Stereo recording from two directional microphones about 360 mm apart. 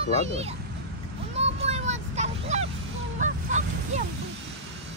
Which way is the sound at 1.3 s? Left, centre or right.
Centre.